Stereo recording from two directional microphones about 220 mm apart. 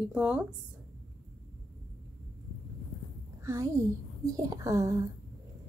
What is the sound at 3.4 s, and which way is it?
A child's voice, 15° right (ahead or behind).